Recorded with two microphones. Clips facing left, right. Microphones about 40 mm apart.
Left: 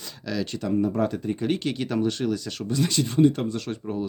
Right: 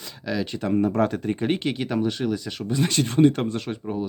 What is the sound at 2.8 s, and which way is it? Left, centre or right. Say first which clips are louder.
Speech: right 2 dB; right.